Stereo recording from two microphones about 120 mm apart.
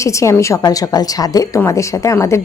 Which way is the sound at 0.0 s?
25° left (ahead or behind).